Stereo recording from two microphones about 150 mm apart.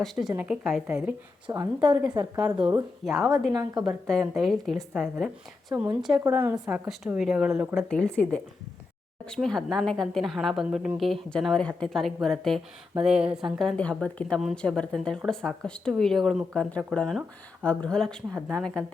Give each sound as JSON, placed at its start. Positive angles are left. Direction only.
{"t": 0.0, "sound": "a woman's voice", "side_deg": 0}
{"t": 1.5, "sound": "a woman's voice", "side_deg": -30}
{"t": 3.0, "sound": "a woman's voice", "side_deg": 0}
{"t": 6.1, "sound": "speech", "side_deg": -15}
{"t": 7.8, "sound": "a woman's voice", "side_deg": 5}